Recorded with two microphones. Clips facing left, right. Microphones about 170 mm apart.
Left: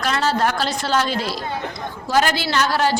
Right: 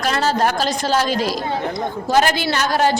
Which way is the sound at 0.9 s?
15° right (ahead or behind).